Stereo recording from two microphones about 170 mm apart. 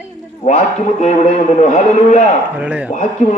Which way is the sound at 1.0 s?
40° left (ahead or behind).